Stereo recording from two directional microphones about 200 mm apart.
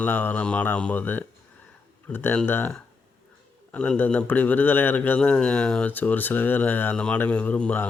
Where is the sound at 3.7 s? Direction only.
5° left (ahead or behind).